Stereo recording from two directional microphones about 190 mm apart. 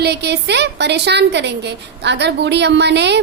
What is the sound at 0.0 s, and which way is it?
A woman's voice, 60° right (ahead or behind).